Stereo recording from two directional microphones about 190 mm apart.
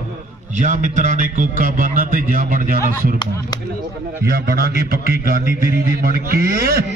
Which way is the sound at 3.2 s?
20° left (ahead or behind).